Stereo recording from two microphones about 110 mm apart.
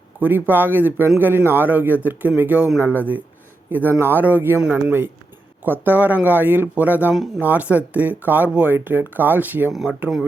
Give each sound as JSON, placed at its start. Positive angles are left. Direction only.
{"t": 0.2, "sound": "speech", "side_deg": -15}